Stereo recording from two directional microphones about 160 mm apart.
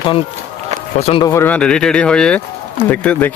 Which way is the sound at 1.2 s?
15° left (ahead or behind).